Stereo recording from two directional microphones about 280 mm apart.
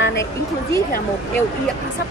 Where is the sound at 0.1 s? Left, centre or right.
Centre.